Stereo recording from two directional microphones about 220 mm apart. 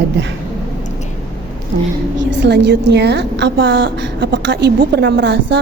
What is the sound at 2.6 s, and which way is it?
A woman's voice, 50° right (ahead or behind).